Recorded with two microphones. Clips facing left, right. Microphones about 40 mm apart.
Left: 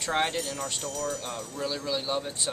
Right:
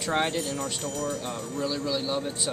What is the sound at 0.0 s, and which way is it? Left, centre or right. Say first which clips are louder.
Speech: right 1 dB; centre.